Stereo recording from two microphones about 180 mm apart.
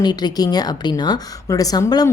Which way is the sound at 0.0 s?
25° left (ahead or behind).